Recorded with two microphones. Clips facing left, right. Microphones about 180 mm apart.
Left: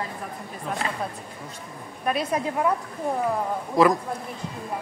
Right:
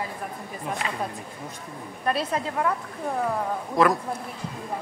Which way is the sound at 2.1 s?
10° left (ahead or behind).